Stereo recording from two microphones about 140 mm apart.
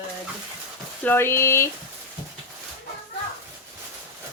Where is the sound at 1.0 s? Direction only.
15° left (ahead or behind).